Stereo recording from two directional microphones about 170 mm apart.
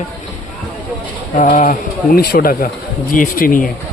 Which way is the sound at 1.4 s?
50° left (ahead or behind).